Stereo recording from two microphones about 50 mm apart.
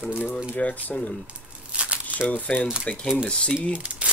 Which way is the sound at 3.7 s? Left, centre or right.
Right.